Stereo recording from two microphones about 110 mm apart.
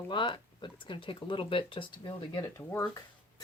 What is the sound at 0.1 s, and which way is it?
Speech, 45° left (ahead or behind).